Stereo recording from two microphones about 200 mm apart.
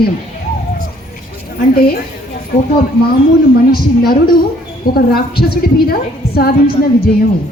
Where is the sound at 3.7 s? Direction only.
50° left (ahead or behind).